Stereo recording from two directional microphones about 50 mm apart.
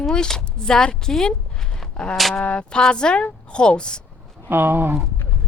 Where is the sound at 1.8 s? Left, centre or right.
Centre.